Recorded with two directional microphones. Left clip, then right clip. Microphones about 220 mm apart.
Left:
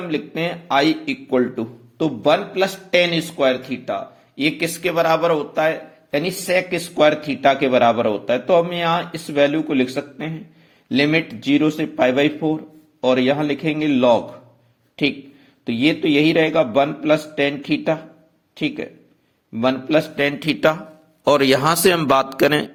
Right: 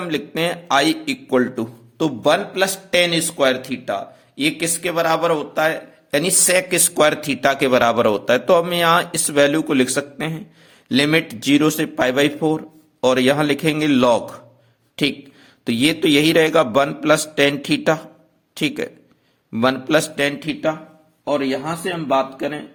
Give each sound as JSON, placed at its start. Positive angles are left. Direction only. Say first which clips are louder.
{"t": 0.1, "sound": "a man's voice", "louder": "right 2 dB", "side_deg": -10}
{"t": 20.5, "sound": "a man's voice", "louder": "left 4 dB", "side_deg": 20}
{"t": 21.2, "sound": "speech", "louder": "left 6 dB", "side_deg": 45}